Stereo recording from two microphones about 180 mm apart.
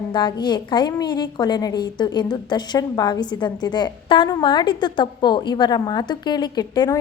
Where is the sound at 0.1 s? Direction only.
25° left (ahead or behind).